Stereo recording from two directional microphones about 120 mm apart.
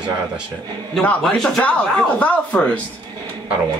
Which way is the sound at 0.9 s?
10° left (ahead or behind).